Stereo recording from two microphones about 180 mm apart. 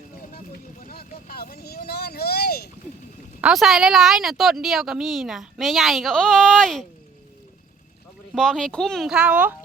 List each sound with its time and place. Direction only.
0.9 s vehicle: 60° left (ahead or behind)
3.4 s a woman's voice: centre (ahead or behind)
8.4 s a woman's voice: 5° left (ahead or behind)